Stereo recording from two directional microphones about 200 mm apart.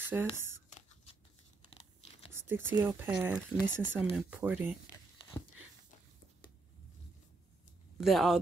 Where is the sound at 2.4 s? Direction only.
10° right (ahead or behind).